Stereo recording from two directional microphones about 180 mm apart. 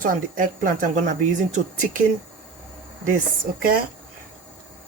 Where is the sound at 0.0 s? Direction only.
50° right (ahead or behind).